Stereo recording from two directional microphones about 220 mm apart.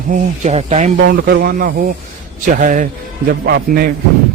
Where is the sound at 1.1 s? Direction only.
45° right (ahead or behind).